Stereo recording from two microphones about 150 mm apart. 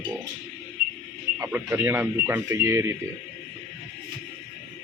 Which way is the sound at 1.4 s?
15° right (ahead or behind).